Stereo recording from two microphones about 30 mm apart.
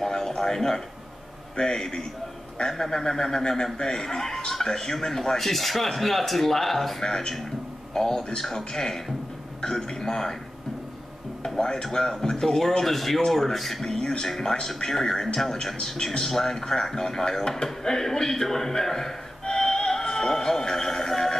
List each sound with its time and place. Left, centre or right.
0.0 s a sound: centre
0.3 s speech: centre
7.0 s speech: centre
11.4 s speech: left; by 13.8 s centre
13.8 s speech: left